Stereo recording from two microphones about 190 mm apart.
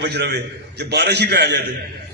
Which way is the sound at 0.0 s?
60° right (ahead or behind).